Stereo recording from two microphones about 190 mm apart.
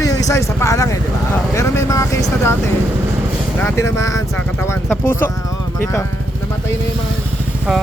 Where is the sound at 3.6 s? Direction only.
15° left (ahead or behind).